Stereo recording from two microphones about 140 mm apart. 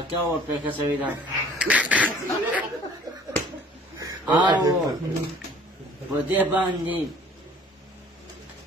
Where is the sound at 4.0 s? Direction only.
25° right (ahead or behind).